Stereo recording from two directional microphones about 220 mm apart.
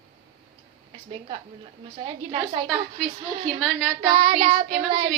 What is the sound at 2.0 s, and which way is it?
Child singing, 20° right (ahead or behind).